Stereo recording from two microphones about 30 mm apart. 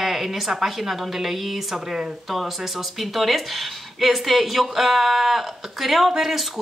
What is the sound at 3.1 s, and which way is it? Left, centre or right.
Speech, centre.